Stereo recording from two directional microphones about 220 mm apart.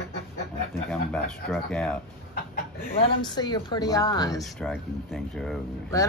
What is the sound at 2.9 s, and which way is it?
Speech, 20° left (ahead or behind).